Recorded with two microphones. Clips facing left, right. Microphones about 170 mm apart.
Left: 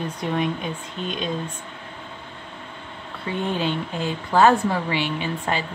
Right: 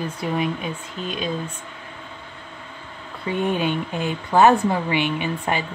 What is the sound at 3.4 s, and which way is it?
A woman's voice, 15° right (ahead or behind).